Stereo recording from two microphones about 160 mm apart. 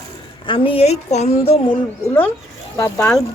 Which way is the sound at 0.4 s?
35° left (ahead or behind).